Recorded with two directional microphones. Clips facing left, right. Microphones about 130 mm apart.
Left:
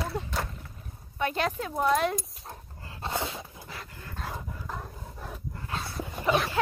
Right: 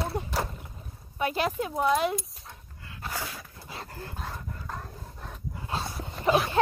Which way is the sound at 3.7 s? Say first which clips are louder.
Right 3 dB; 30° right (ahead or behind).